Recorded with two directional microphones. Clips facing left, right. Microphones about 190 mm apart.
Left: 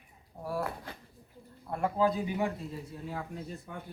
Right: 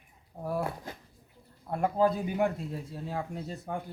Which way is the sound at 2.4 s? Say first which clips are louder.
Right 4 dB; 70° right (ahead or behind).